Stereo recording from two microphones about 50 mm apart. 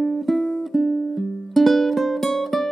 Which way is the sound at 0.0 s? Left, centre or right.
Centre.